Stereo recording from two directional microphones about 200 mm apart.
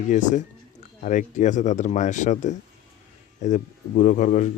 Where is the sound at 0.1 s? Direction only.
40° left (ahead or behind).